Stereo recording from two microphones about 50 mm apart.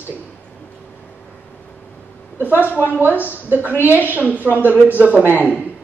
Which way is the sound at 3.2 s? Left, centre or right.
Right.